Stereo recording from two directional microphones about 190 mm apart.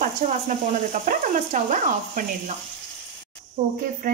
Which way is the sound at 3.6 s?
40° right (ahead or behind).